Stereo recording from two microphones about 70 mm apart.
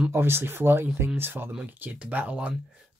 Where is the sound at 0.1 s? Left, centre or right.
Right.